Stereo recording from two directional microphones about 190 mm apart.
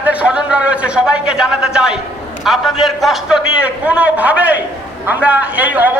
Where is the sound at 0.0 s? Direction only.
5° right (ahead or behind).